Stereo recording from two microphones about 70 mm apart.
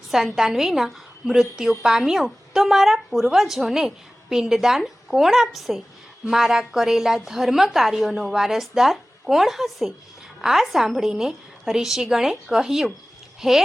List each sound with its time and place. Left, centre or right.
0.1 s speech: centre